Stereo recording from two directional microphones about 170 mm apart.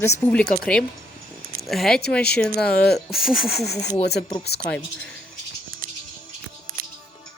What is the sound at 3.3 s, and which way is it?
Speech, 65° left (ahead or behind).